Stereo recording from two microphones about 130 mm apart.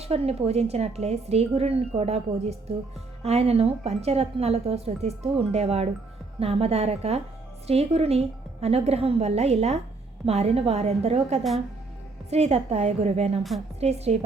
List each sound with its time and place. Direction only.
0.0 s a woman's voice: 50° right (ahead or behind)